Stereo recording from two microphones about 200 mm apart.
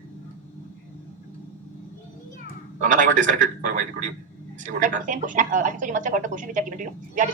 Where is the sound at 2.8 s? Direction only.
40° right (ahead or behind).